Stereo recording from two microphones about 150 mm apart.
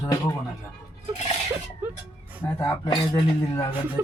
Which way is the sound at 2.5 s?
15° left (ahead or behind).